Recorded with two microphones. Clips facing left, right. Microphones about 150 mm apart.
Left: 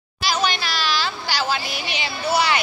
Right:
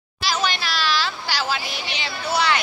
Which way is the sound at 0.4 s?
Centre (ahead or behind).